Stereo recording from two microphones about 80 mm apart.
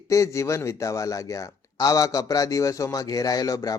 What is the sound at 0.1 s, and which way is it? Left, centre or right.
Speech, left.